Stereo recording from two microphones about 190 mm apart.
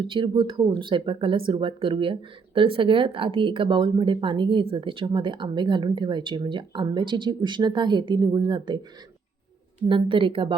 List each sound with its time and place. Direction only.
0.0 s speech: 25° right (ahead or behind)
9.9 s speech: 25° right (ahead or behind)